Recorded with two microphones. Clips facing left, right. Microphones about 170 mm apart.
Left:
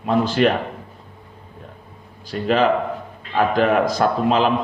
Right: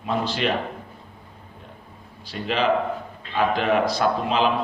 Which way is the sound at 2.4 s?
45° left (ahead or behind).